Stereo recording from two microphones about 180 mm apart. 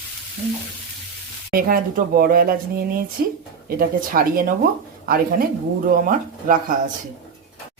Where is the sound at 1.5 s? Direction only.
50° right (ahead or behind).